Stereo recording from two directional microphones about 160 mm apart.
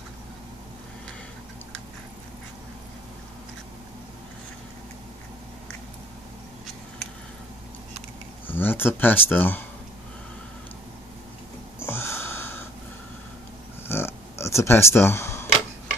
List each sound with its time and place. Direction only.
8.5 s speech: 10° left (ahead or behind)
11.8 s a sound: 15° left (ahead or behind)
13.8 s camera: 15° left (ahead or behind)